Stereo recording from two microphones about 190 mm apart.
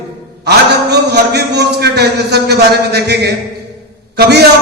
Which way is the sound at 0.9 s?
60° right (ahead or behind).